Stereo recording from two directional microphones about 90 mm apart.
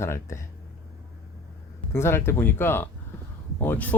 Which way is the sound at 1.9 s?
30° left (ahead or behind).